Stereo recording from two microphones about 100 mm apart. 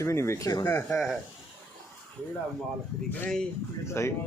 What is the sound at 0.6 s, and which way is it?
Speech, 20° left (ahead or behind).